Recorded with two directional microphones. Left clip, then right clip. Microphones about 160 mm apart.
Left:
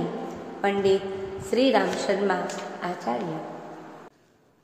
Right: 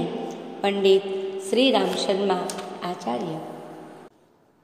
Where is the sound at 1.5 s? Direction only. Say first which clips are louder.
Right 1 dB; 35° right (ahead or behind).